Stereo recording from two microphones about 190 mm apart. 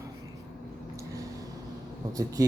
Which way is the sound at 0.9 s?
20° right (ahead or behind).